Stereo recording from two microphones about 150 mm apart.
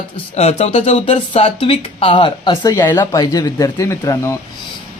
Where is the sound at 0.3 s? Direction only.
45° left (ahead or behind); by 4.2 s 20° left (ahead or behind).